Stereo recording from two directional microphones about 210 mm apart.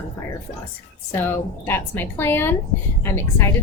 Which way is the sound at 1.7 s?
10° left (ahead or behind).